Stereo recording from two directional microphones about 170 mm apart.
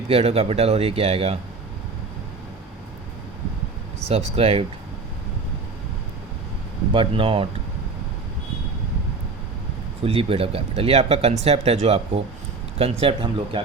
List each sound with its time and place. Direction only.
0.1 s speech: 35° right (ahead or behind)
4.1 s speech: 35° right (ahead or behind)
6.9 s speech: 30° right (ahead or behind)
10.0 s speech: 35° right (ahead or behind)